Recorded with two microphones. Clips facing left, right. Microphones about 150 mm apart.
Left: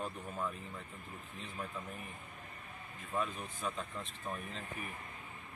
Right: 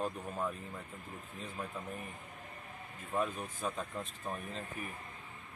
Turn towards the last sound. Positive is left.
turn(degrees=-10)  # may be behind; listen again after turning